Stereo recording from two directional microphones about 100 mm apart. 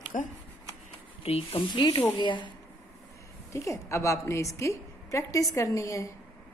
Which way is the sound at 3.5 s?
30° left (ahead or behind).